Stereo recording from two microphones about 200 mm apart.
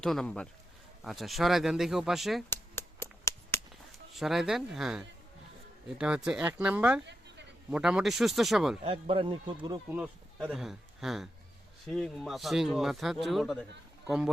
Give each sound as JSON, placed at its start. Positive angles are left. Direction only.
{"t": 0.0, "sound": "a man's voice", "side_deg": 0}
{"t": 2.5, "sound": "a sound", "side_deg": 10}
{"t": 4.1, "sound": "a man's voice", "side_deg": 0}
{"t": 7.0, "sound": "a sound", "side_deg": -60}
{"t": 7.7, "sound": "a man's voice", "side_deg": -5}
{"t": 8.8, "sound": "speech", "side_deg": -25}
{"t": 9.9, "sound": "a man's voice", "side_deg": -5}